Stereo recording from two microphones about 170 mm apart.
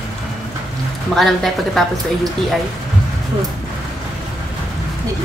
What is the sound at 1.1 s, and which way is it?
Speech, centre (ahead or behind).